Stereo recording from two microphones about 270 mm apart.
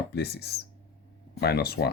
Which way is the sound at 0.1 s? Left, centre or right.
Left.